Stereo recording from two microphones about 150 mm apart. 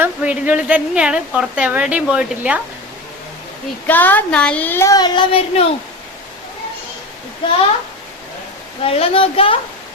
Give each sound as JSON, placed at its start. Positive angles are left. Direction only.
{"t": 0.0, "sound": "a woman's voice", "side_deg": -10}
{"t": 3.8, "sound": "a woman's voice", "side_deg": 10}
{"t": 8.8, "sound": "a woman's voice", "side_deg": 40}